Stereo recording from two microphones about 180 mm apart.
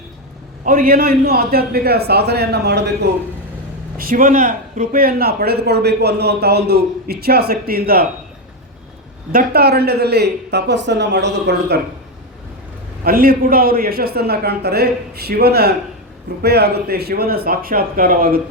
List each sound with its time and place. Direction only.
0.6 s a man's voice: 50° right (ahead or behind); by 3.1 s 65° right (ahead or behind)
3.9 s a man's voice: 50° right (ahead or behind)
9.3 s a man's voice: 55° right (ahead or behind)
13.1 s a man's voice: 55° right (ahead or behind)